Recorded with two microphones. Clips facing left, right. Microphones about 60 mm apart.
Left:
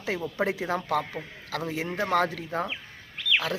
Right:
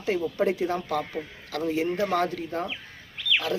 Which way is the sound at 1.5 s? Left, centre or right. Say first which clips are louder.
Right 5 dB; left.